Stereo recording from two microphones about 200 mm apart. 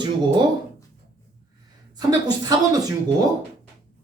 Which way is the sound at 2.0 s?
20° right (ahead or behind).